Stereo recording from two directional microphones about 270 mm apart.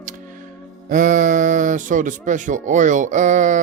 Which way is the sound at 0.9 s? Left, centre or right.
Right.